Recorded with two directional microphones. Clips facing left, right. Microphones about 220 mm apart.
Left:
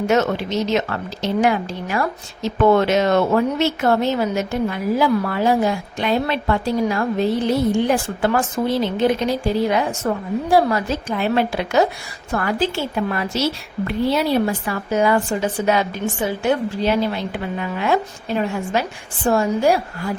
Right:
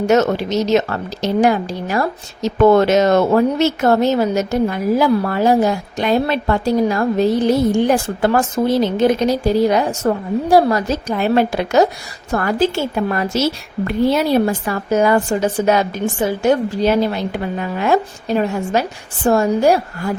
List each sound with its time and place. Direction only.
0.1 s a woman's voice: 40° right (ahead or behind)